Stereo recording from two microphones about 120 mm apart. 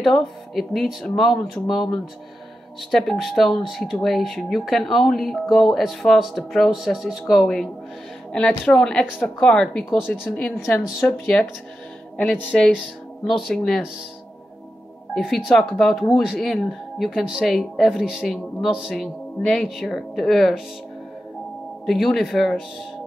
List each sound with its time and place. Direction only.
0.0 s speech: centre (ahead or behind)
2.9 s speech: centre (ahead or behind)
12.7 s speech: 5° right (ahead or behind)
15.1 s speech: centre (ahead or behind)
21.8 s speech: centre (ahead or behind)